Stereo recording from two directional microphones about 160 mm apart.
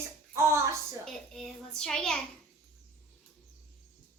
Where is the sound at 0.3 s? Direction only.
20° right (ahead or behind).